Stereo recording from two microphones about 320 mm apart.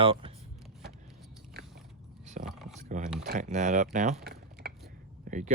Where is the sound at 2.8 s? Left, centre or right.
Right.